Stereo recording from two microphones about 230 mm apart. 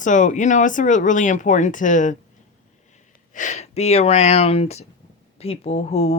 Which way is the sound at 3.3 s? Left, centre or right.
Left.